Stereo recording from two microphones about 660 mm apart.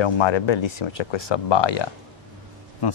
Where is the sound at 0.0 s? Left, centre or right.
Left.